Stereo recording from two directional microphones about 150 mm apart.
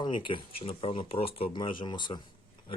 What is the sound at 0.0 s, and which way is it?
Speech, 35° left (ahead or behind).